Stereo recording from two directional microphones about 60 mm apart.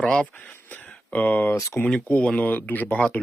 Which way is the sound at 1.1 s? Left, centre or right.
Left.